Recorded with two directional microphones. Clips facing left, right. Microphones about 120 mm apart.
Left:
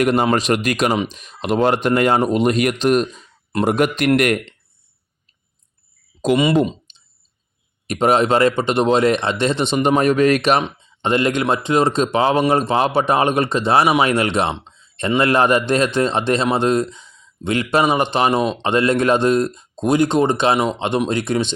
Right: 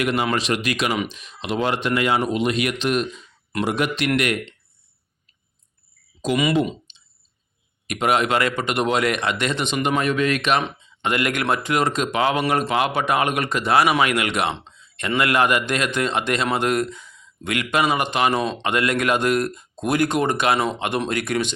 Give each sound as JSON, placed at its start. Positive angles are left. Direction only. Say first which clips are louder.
{"t": 0.0, "sound": "speech", "louder": "left 6 dB", "side_deg": 40}
{"t": 6.3, "sound": "speech", "louder": "left 4 dB", "side_deg": 30}
{"t": 6.9, "sound": "clicking", "louder": "left 1 dB", "side_deg": 45}
{"t": 7.9, "sound": "speech", "louder": "left 5 dB", "side_deg": 35}
{"t": 10.0, "sound": "a man's voice", "louder": "left 6 dB", "side_deg": 40}
{"t": 11.0, "sound": "a man's voice", "louder": "left 5 dB", "side_deg": 25}